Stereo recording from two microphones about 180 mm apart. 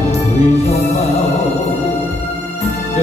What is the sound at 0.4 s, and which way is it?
Music, 35° left (ahead or behind).